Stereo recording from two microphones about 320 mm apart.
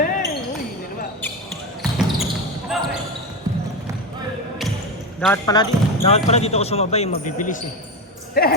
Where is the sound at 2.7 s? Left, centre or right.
Centre.